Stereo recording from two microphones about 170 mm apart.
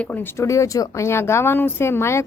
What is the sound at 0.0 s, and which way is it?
Speech, 10° left (ahead or behind).